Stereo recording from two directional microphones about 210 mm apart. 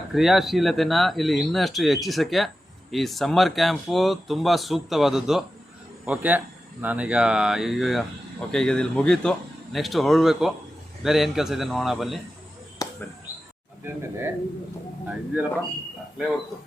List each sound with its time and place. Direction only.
0.1 s speech: centre (ahead or behind)
12.8 s a sound: 15° left (ahead or behind)
15.0 s speech: 10° right (ahead or behind)